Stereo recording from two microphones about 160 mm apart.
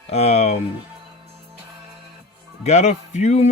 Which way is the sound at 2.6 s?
45° left (ahead or behind).